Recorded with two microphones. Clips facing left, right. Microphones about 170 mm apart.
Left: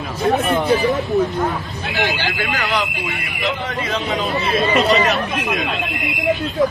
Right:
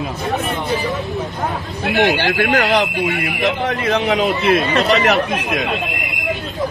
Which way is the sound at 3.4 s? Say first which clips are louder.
Right 4 dB; 60° right (ahead or behind).